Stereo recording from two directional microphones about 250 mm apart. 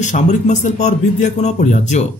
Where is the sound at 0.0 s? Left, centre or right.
Left.